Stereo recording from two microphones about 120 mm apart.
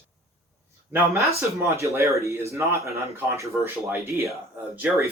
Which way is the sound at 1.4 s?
25° right (ahead or behind).